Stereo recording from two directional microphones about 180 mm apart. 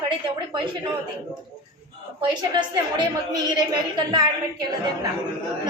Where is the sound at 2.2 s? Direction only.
25° right (ahead or behind).